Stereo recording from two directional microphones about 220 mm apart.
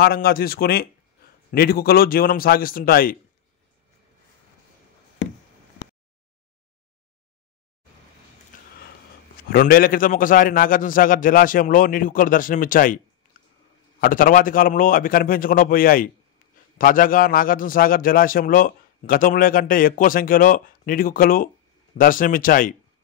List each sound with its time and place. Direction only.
0.0 s a man's voice: 45° left (ahead or behind)
8.5 s a sound: 35° left (ahead or behind)
9.5 s a man's voice: 40° left (ahead or behind)
14.0 s a man's voice: 40° left (ahead or behind)